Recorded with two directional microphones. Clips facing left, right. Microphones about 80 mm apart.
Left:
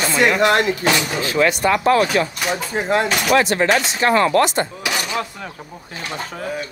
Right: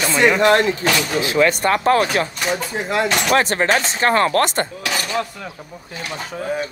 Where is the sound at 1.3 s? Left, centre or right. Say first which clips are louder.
Even; right.